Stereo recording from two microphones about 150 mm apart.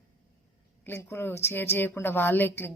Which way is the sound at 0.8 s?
15° left (ahead or behind).